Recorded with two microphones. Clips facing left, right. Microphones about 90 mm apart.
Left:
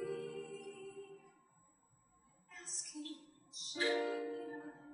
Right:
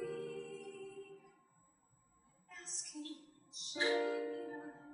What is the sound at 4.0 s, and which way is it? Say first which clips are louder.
Music: right 1 dB; 5° left (ahead or behind).